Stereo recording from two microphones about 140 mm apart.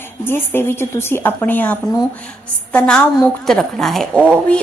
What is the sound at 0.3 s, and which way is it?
A woman's voice, 15° left (ahead or behind).